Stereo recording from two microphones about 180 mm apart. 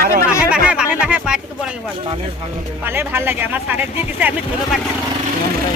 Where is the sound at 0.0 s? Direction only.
50° right (ahead or behind).